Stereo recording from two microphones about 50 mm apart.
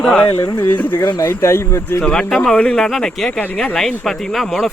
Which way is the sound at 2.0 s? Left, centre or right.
Centre.